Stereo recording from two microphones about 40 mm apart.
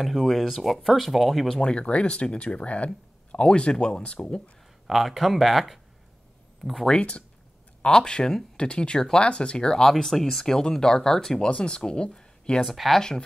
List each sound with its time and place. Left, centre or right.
0.0 s speech: centre
1.6 s speech: left
4.8 s speech: centre
7.0 s speech: left
9.8 s speech: centre
12.6 s speech: centre